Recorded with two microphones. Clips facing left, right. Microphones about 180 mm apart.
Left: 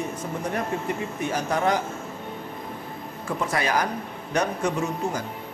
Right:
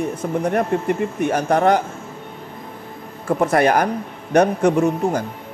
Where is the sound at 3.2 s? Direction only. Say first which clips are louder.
Right 10 dB; 55° right (ahead or behind).